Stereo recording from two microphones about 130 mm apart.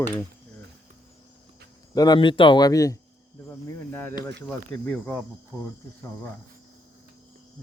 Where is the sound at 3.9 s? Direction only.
15° left (ahead or behind).